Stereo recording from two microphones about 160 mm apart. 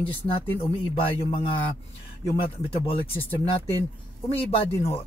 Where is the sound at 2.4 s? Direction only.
35° left (ahead or behind).